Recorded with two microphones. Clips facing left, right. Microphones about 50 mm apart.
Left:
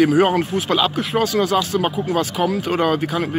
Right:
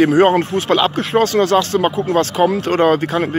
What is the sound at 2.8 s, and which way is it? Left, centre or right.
Speech, right.